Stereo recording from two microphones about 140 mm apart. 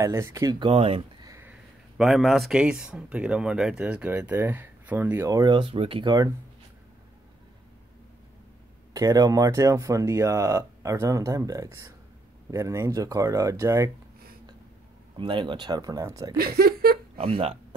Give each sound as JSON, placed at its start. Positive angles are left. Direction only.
{"t": 0.0, "sound": "speech", "side_deg": -20}
{"t": 0.6, "sound": "speech", "side_deg": -40}
{"t": 1.2, "sound": "a sound", "side_deg": -20}
{"t": 1.5, "sound": "speech", "side_deg": 0}
{"t": 8.9, "sound": "speech", "side_deg": -25}
{"t": 15.1, "sound": "speech", "side_deg": -35}
{"t": 16.3, "sound": "a sound", "side_deg": -90}
{"t": 17.2, "sound": "speech", "side_deg": -40}